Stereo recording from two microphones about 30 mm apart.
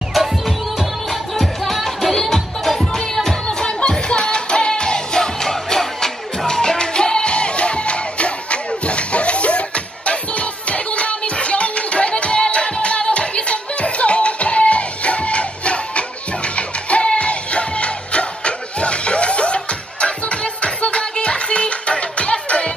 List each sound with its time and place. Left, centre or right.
1.3 s music: centre
3.4 s music: left